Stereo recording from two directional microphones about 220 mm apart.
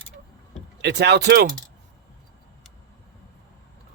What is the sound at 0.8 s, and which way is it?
Speech, 50° right (ahead or behind).